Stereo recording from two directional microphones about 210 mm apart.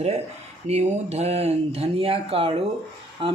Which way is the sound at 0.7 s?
30° right (ahead or behind).